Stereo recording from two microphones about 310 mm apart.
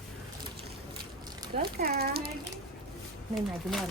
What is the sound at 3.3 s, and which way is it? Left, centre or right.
Speech, centre.